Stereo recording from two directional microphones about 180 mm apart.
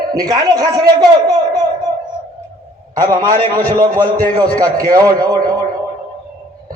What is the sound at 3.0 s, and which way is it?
A man's voice, 50° right (ahead or behind).